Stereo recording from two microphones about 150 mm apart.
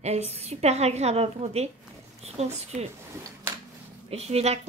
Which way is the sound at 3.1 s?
15° right (ahead or behind).